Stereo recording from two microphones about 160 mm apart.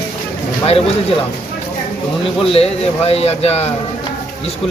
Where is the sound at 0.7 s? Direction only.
35° left (ahead or behind).